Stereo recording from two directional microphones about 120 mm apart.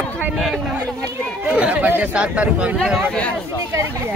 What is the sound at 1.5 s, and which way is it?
Speech, 10° right (ahead or behind).